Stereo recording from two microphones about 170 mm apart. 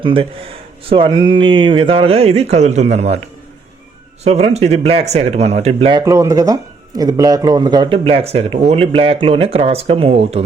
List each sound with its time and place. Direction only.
0.0 s speech: 30° right (ahead or behind)
4.2 s speech: 40° right (ahead or behind)